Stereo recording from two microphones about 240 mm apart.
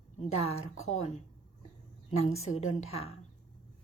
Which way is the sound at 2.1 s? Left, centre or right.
Left.